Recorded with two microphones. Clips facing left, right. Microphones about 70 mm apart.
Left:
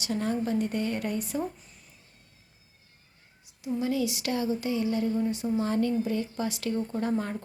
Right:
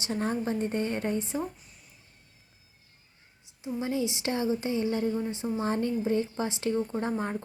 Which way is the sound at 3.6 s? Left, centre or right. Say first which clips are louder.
Left 2 dB; right.